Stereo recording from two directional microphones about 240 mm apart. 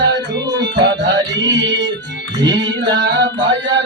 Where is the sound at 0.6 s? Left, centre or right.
Right.